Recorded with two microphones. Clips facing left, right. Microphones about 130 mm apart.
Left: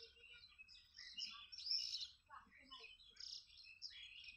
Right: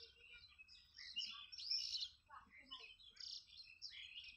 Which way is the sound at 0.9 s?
90° right.